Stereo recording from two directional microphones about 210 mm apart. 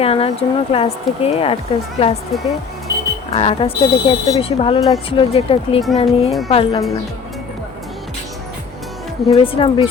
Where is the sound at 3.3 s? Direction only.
30° left (ahead or behind).